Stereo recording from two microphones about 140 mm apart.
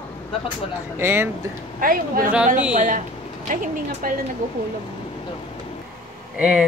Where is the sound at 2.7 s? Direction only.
65° right (ahead or behind).